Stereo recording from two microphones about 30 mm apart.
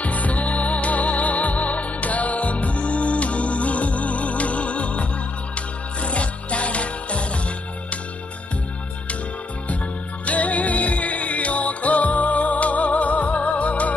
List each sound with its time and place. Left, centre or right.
0.0 s music: left
6.0 s music: left
10.2 s music: left